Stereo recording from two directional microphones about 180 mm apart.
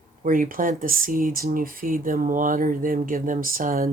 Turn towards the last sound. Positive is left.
turn(degrees=-55)  # may be behind; listen again after turning